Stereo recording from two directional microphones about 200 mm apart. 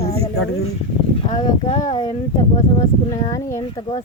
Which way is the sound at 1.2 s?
30° left (ahead or behind).